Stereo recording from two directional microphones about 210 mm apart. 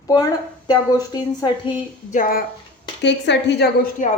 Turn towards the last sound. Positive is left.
turn(degrees=40)  # may be behind; listen again after turning